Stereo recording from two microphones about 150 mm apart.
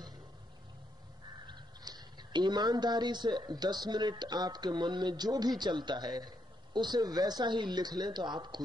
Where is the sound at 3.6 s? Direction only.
30° right (ahead or behind).